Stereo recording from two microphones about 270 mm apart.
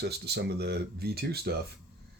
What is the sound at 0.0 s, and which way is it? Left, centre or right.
Speech, right.